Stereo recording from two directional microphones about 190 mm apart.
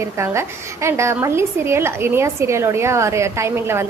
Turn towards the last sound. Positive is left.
turn(degrees=-15)  # may be behind; listen again after turning